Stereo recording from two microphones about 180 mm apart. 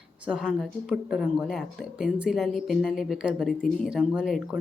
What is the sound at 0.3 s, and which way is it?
Speech, 5° right (ahead or behind).